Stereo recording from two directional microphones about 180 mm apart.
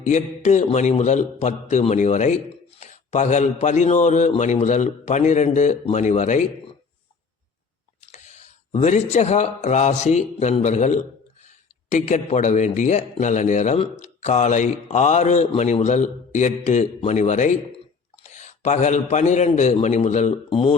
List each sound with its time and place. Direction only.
0.0 s a man's voice: 40° left (ahead or behind)
8.0 s a man's voice: 40° left (ahead or behind)